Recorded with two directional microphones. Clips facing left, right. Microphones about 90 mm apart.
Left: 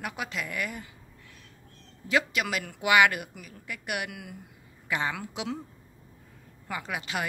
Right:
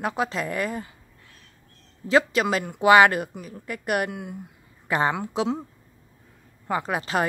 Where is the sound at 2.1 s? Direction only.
35° right (ahead or behind).